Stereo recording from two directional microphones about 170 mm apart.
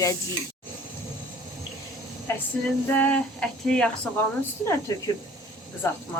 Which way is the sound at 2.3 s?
15° left (ahead or behind).